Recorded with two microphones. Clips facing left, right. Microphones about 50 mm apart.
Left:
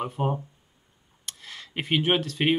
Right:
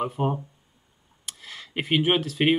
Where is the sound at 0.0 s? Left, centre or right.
Centre.